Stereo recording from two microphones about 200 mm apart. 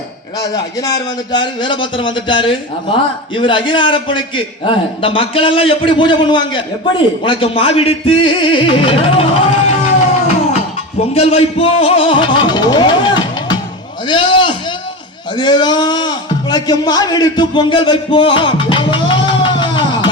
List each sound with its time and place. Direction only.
0.3 s a man's voice: 20° left (ahead or behind)
11.1 s music: 30° left (ahead or behind)
14.1 s a sound: 25° left (ahead or behind)
15.4 s speech: 20° left (ahead or behind)